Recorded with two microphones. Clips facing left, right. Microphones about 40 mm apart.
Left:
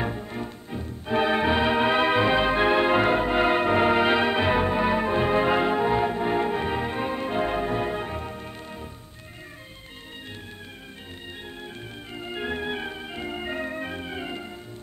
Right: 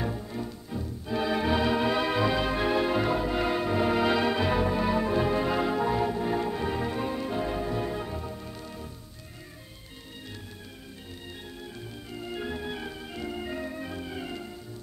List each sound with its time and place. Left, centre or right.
0.0 s music: left
12.1 s organ: left